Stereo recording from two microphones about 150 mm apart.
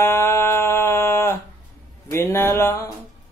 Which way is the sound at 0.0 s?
15° left (ahead or behind).